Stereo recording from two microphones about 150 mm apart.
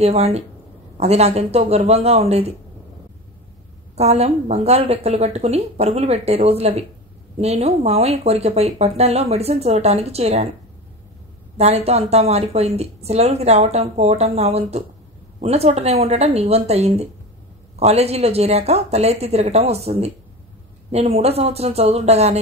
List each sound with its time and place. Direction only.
0.0 s speech: 45° right (ahead or behind)
3.9 s speech: 45° right (ahead or behind)
11.5 s speech: 45° right (ahead or behind)